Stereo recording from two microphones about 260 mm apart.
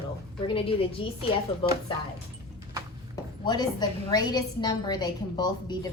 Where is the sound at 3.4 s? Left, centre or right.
Centre.